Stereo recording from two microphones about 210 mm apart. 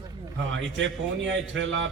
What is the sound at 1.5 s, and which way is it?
Speech, 60° right (ahead or behind).